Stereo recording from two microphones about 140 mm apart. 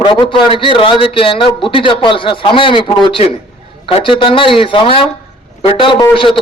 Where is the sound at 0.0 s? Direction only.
35° left (ahead or behind).